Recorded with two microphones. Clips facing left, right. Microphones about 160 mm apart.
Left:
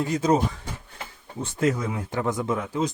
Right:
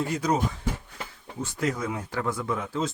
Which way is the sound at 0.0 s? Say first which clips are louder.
Left 4 dB; 20° left (ahead or behind).